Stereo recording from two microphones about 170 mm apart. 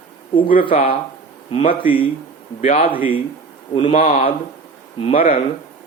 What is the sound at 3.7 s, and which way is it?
Speech, 35° left (ahead or behind).